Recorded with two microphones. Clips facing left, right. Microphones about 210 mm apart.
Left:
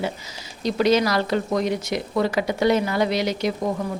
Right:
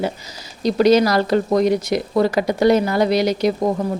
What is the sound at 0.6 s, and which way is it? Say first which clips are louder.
A woman's voice: right 5 dB; 40° right (ahead or behind).